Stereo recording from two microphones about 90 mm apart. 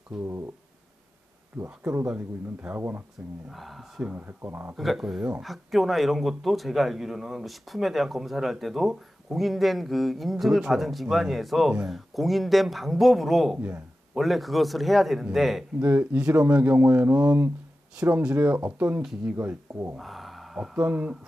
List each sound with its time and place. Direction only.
0.2 s a sound: 30° right (ahead or behind)
1.6 s speech: 25° right (ahead or behind)
3.5 s speech: centre (ahead or behind)
4.0 s speech: 15° right (ahead or behind)
4.4 s speech: 25° right (ahead or behind)
4.7 s speech: 5° right (ahead or behind)
13.6 s speech: 25° right (ahead or behind)
14.1 s speech: centre (ahead or behind)
15.8 s speech: 20° right (ahead or behind)
20.0 s speech: centre (ahead or behind)